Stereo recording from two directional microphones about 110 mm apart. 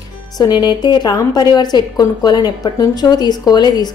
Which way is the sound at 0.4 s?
40° left (ahead or behind).